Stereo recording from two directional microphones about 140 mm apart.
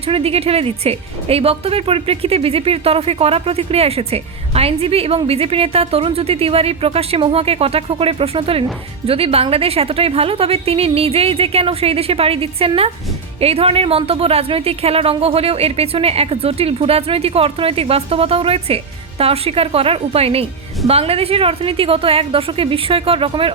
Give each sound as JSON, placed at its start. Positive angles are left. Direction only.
{"t": 0.0, "sound": "speech", "side_deg": -45}